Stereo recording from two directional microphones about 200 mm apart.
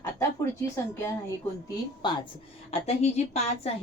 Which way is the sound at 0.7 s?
10° left (ahead or behind).